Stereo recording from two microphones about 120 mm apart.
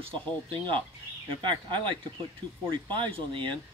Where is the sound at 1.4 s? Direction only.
40° right (ahead or behind).